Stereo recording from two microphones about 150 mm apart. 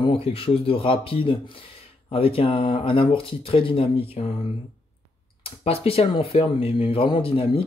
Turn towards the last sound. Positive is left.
turn(degrees=35)  # may be behind; listen again after turning